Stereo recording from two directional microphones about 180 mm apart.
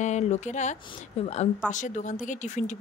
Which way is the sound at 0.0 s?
40° left (ahead or behind).